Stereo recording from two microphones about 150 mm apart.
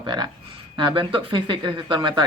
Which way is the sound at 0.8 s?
30° right (ahead or behind).